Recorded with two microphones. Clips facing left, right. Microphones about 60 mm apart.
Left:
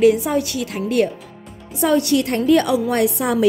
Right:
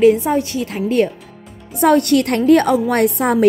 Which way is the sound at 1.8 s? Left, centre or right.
Right.